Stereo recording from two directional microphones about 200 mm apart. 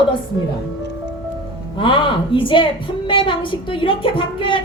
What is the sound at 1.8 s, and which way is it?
Speech, 25° left (ahead or behind).